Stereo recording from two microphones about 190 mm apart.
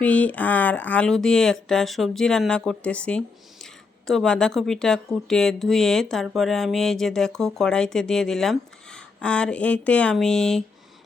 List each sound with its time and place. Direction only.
0.0 s speech: 5° left (ahead or behind)